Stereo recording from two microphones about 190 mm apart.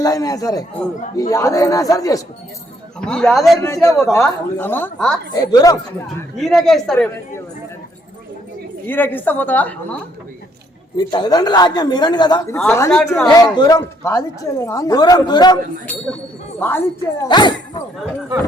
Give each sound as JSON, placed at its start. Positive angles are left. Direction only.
{"t": 0.0, "sound": "a man's voice", "side_deg": 20}
{"t": 3.0, "sound": "a man's voice", "side_deg": 5}
{"t": 3.6, "sound": "a woman's voice", "side_deg": 15}
{"t": 5.3, "sound": "a man's voice", "side_deg": 20}
{"t": 6.3, "sound": "a man's voice", "side_deg": 0}
{"t": 8.9, "sound": "a woman's voice", "side_deg": 10}
{"t": 10.9, "sound": "a man's voice", "side_deg": 20}
{"t": 12.5, "sound": "a woman's voice", "side_deg": 10}
{"t": 16.6, "sound": "a woman's voice", "side_deg": 10}
{"t": 17.2, "sound": "speech", "side_deg": 25}